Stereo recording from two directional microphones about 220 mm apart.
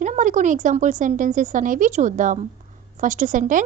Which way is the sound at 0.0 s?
35° right (ahead or behind).